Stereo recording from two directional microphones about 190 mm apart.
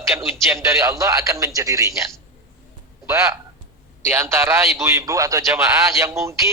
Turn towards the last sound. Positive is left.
turn(degrees=-15)  # may be behind; listen again after turning